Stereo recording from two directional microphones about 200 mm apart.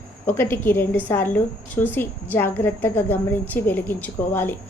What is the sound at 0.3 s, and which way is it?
A woman's voice, 10° left (ahead or behind).